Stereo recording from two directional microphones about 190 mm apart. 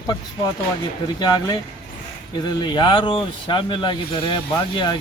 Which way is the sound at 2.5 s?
25° left (ahead or behind).